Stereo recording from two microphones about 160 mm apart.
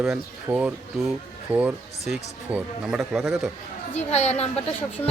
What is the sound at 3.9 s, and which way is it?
Speech, 40° left (ahead or behind).